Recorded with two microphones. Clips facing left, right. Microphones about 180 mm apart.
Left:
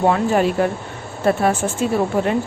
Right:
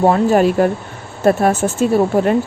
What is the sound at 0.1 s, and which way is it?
A woman's voice, 40° right (ahead or behind).